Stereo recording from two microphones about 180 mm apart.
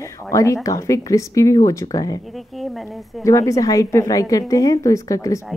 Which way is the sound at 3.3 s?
15° left (ahead or behind).